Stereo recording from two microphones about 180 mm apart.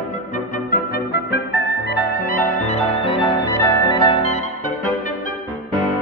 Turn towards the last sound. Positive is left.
turn(degrees=20)  # may be behind; listen again after turning